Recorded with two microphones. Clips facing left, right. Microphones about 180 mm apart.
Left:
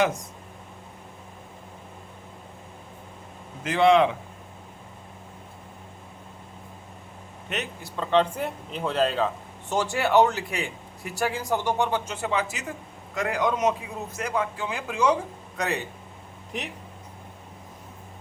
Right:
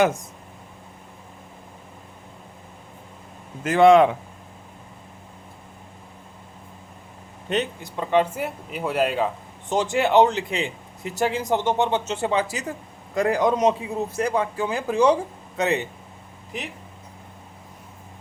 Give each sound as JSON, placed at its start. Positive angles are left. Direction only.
{"t": 3.6, "sound": "speech", "side_deg": -45}
{"t": 7.5, "sound": "speech", "side_deg": -25}
{"t": 7.9, "sound": "a man's voice", "side_deg": -10}